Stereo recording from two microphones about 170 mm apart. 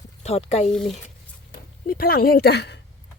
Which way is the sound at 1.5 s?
60° left (ahead or behind).